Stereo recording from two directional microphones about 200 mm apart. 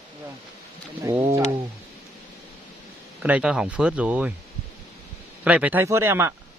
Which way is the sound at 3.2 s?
5° right (ahead or behind).